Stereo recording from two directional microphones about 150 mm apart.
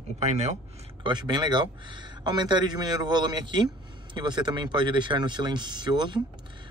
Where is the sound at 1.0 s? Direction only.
30° right (ahead or behind).